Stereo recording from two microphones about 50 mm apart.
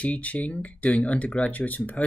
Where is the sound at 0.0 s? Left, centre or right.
Left.